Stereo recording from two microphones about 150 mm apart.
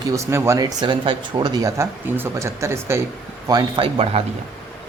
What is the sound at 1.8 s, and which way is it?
Speech, 15° right (ahead or behind).